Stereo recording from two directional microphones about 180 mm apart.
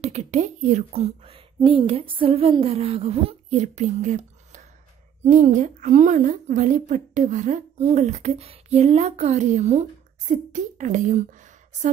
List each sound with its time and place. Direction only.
0.0 s a woman's voice: 40° right (ahead or behind)